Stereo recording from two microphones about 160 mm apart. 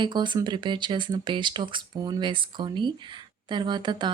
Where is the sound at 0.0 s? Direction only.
30° right (ahead or behind).